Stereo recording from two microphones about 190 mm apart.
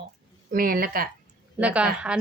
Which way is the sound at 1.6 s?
5° right (ahead or behind).